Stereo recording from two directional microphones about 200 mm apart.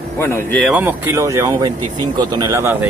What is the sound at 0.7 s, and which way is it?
Speech, 10° right (ahead or behind).